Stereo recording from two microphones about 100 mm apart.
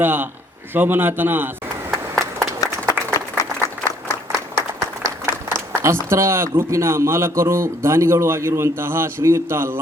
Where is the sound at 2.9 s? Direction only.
35° left (ahead or behind).